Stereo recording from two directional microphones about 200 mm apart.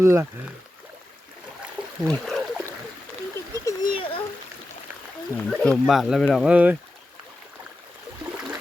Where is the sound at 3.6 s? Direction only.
20° left (ahead or behind).